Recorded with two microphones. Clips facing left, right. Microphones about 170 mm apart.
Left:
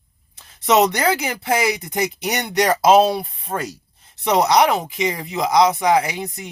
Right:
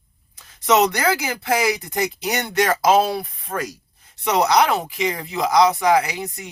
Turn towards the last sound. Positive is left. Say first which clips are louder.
# left 2 dB
turn(degrees=20)  # may be behind; listen again after turning